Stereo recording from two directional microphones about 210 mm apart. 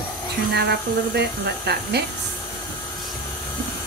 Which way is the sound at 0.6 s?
50° right (ahead or behind).